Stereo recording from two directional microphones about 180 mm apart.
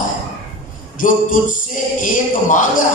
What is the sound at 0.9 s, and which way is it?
Speech, 45° left (ahead or behind).